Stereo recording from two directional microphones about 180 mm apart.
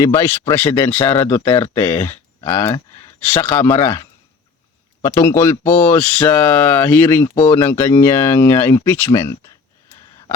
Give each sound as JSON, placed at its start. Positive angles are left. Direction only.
{"t": 0.0, "sound": "speech", "side_deg": 15}
{"t": 5.0, "sound": "speech", "side_deg": 15}